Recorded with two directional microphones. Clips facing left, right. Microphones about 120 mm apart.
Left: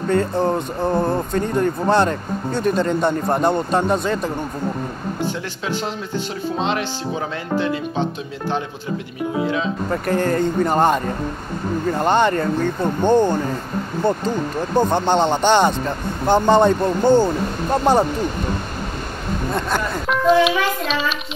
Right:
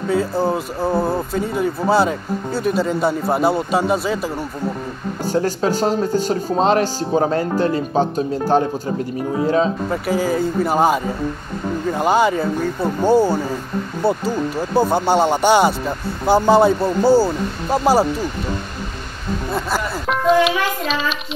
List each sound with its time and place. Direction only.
0.1 s speech: 5° right (ahead or behind)
5.2 s speech: 40° right (ahead or behind)
9.8 s speech: 5° right (ahead or behind)
19.5 s speech: centre (ahead or behind)